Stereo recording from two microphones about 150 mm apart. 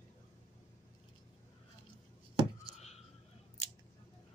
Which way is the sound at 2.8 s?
45° left (ahead or behind).